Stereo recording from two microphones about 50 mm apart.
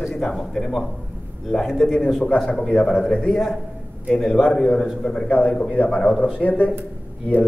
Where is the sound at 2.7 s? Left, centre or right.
Left.